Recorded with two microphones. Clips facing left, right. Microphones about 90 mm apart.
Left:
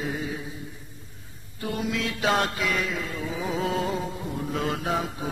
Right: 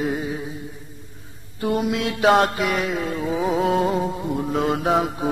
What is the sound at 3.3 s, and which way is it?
Mantra, 50° right (ahead or behind).